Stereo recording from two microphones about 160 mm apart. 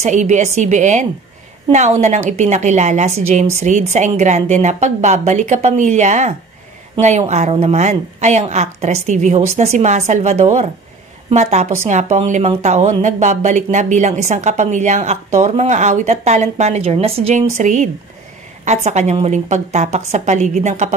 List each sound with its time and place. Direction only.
0.0 s a woman's voice: 50° right (ahead or behind)